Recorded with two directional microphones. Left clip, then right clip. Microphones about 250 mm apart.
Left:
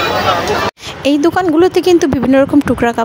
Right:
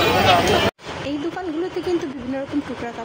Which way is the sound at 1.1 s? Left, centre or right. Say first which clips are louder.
Left 16 dB; left.